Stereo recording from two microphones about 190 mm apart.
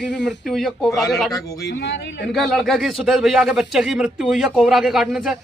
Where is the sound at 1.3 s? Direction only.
20° left (ahead or behind).